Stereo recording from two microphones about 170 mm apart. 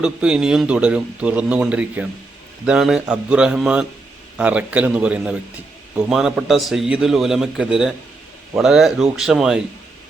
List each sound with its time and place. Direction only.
0.0 s a man's voice: 5° right (ahead or behind)